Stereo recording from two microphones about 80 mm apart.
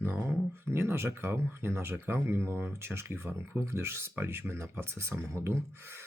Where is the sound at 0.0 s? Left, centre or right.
Right.